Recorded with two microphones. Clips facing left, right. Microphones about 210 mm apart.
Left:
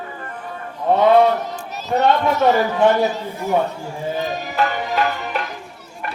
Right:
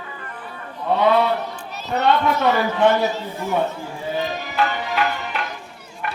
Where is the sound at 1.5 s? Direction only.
40° left (ahead or behind).